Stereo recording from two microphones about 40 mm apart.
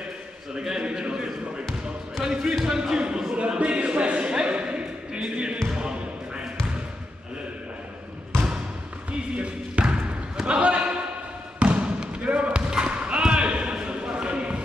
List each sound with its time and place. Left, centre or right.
0.6 s a man's voice: right
2.6 s a sound: centre
5.8 s basketball bounce: right
9.4 s basketball bounce: right